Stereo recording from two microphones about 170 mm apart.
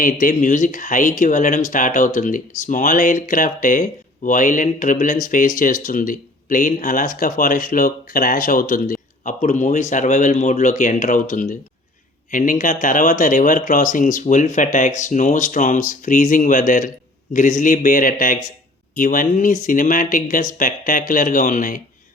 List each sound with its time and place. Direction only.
0.0 s speech: 50° left (ahead or behind)